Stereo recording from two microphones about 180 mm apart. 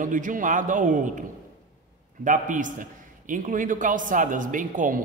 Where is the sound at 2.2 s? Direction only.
45° right (ahead or behind).